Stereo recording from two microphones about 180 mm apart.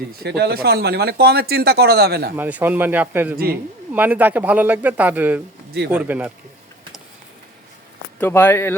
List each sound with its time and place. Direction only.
0.2 s speech: 65° right (ahead or behind)
2.3 s speech: 10° right (ahead or behind)
3.3 s speech: 55° right (ahead or behind)
3.9 s speech: 10° right (ahead or behind)
8.2 s speech: 10° left (ahead or behind)